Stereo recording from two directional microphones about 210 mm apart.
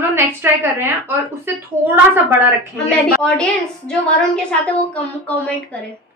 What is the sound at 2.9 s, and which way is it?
A woman's voice, 5° left (ahead or behind).